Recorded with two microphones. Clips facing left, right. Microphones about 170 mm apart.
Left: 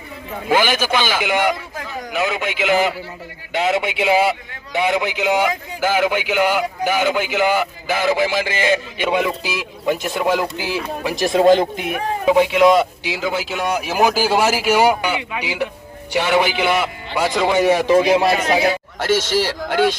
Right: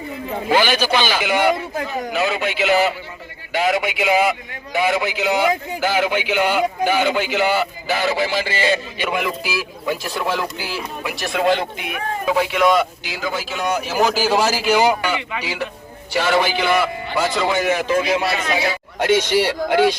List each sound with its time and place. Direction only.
0.4 s a man's voice: 10° left (ahead or behind)
11.0 s a man's voice: 40° left (ahead or behind)
12.2 s a man's voice: 20° left (ahead or behind)
17.6 s a man's voice: 30° left (ahead or behind)
18.9 s speech: 15° right (ahead or behind)